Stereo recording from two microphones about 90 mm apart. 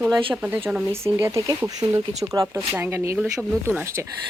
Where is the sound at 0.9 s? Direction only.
30° right (ahead or behind).